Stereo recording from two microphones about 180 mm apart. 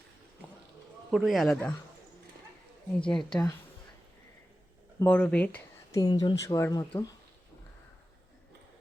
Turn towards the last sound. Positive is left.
turn(degrees=20)  # may be behind; listen again after turning